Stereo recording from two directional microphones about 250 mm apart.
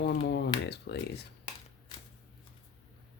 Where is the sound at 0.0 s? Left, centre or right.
Left.